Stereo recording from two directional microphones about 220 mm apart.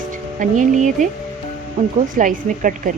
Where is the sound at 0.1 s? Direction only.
35° right (ahead or behind).